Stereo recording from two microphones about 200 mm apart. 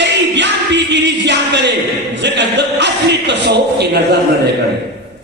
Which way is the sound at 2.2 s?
60° right (ahead or behind).